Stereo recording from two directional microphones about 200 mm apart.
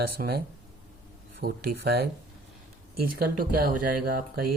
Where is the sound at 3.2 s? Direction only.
50° right (ahead or behind).